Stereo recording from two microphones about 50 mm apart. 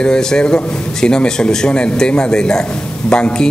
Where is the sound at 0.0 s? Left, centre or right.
Centre.